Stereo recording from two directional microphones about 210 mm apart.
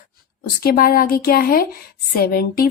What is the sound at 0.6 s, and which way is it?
A woman's voice, 45° left (ahead or behind).